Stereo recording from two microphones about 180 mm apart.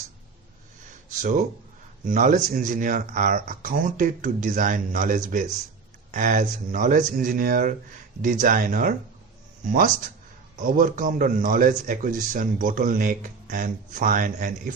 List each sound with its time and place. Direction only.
1.2 s speech: 45° right (ahead or behind)